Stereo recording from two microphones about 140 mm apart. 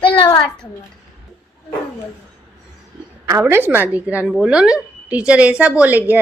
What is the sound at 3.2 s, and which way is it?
A woman's voice, 20° right (ahead or behind).